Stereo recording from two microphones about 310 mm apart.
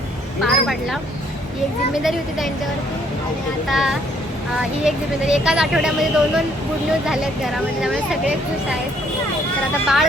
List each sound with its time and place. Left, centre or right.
0.4 s a sound: centre
3.7 s a woman's voice: centre
9.8 s a woman's voice: centre